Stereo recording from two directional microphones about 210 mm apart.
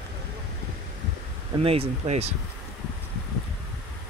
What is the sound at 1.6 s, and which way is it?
Speech, 30° right (ahead or behind).